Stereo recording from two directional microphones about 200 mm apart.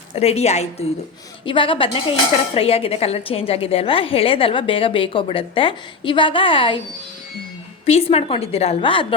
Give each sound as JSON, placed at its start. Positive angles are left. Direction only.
{"t": 0.1, "sound": "a woman's voice", "side_deg": 30}
{"t": 7.9, "sound": "a woman's voice", "side_deg": 30}